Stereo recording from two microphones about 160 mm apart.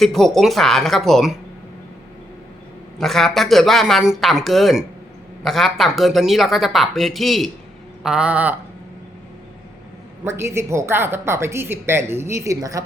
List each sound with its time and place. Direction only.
0.0 s speech: centre (ahead or behind)
3.0 s speech: centre (ahead or behind)
10.2 s speech: 15° right (ahead or behind)